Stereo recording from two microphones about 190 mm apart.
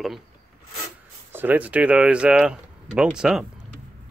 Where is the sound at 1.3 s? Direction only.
10° right (ahead or behind).